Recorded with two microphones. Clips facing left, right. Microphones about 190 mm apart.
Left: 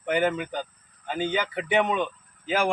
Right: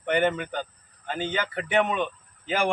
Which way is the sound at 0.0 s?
5° left (ahead or behind).